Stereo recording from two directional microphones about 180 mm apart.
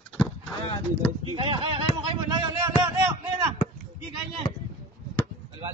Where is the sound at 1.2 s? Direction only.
30° right (ahead or behind).